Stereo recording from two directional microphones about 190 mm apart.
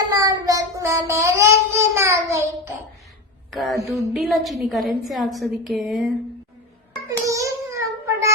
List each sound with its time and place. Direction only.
0.1 s child singing: 20° right (ahead or behind)
3.5 s a woman's voice: centre (ahead or behind)
7.1 s a sound: 15° right (ahead or behind)